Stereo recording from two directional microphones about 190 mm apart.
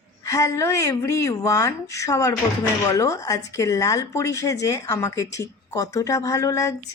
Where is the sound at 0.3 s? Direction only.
15° left (ahead or behind).